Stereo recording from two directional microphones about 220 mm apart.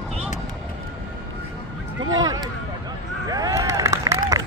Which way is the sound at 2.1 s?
20° right (ahead or behind).